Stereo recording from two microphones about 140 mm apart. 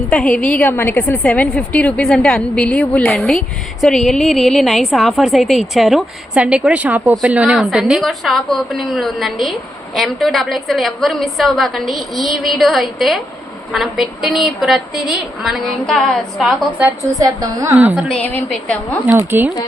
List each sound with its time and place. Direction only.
0.1 s a woman's voice: 5° left (ahead or behind)
17.2 s a woman's voice: 25° right (ahead or behind)
18.1 s a woman's voice: 5° left (ahead or behind)
19.0 s speech: 10° right (ahead or behind)